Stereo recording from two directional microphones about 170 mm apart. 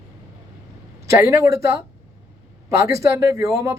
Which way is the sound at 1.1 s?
15° right (ahead or behind).